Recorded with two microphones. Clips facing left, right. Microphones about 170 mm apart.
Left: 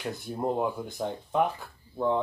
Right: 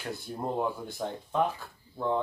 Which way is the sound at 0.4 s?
15° left (ahead or behind).